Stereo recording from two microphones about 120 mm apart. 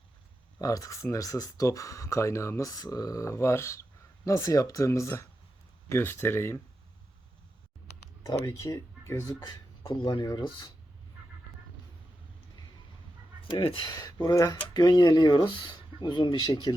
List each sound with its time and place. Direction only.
0.6 s speech: 30° left (ahead or behind)
8.2 s speech: 30° left (ahead or behind)
13.5 s speech: 45° left (ahead or behind)